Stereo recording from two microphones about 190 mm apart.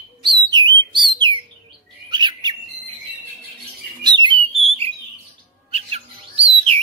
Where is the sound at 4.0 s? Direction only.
25° right (ahead or behind).